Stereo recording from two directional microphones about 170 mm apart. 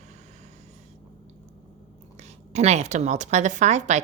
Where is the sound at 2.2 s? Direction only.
40° right (ahead or behind).